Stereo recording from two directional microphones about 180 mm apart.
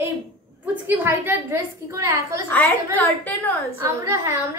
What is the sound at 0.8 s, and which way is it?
A woman's voice, 10° right (ahead or behind).